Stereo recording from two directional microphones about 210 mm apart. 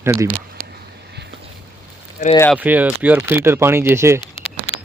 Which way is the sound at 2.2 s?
40° left (ahead or behind).